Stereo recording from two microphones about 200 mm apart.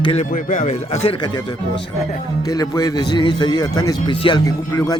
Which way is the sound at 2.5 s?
15° left (ahead or behind).